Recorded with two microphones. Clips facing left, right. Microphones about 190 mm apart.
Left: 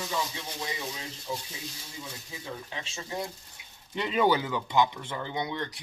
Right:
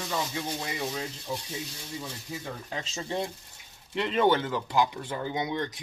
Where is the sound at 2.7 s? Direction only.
40° right (ahead or behind).